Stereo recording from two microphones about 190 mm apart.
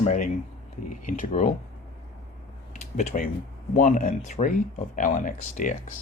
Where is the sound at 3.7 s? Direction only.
45° left (ahead or behind).